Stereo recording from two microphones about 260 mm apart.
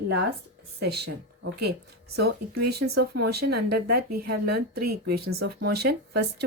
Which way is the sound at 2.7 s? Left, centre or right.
Right.